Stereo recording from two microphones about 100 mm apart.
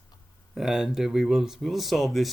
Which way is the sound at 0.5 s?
5° right (ahead or behind).